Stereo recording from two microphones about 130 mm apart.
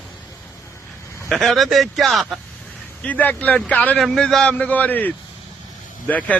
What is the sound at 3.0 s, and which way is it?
Speech, 10° left (ahead or behind).